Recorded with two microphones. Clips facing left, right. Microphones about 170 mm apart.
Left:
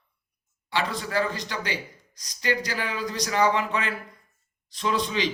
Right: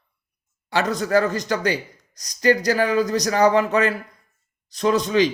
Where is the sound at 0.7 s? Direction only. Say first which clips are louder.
Right 8 dB; 45° right (ahead or behind).